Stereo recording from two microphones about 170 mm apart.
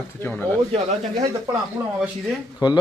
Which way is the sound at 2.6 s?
25° left (ahead or behind).